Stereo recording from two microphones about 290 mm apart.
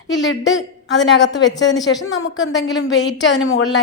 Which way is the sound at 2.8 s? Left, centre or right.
Left.